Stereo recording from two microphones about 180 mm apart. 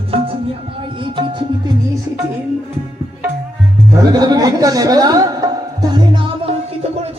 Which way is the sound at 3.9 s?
20° right (ahead or behind).